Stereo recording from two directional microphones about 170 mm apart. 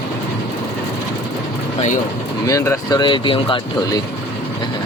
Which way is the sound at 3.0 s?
30° left (ahead or behind).